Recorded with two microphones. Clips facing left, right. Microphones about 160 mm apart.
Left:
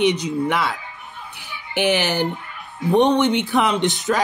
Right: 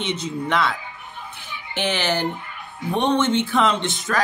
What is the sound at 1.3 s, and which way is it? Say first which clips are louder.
Music: left 7 dB; 15° left (ahead or behind).